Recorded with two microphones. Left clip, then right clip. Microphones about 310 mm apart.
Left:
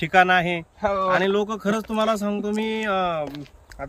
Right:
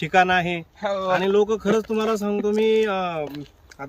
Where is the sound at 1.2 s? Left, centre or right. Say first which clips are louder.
Right 3 dB; centre.